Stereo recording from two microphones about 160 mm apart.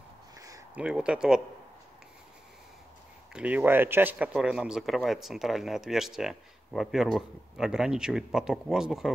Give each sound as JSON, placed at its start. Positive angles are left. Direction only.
{"t": 0.7, "sound": "speech", "side_deg": -5}
{"t": 3.3, "sound": "speech", "side_deg": -10}